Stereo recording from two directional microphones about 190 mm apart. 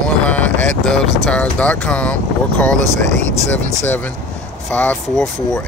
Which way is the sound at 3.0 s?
40° right (ahead or behind).